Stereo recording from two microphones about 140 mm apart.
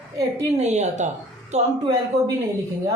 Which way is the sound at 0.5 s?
55° right (ahead or behind).